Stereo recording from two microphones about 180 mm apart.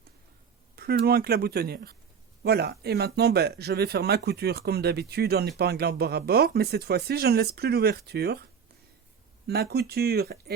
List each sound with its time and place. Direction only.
0.8 s speech: 60° right (ahead or behind)
9.5 s speech: 60° right (ahead or behind)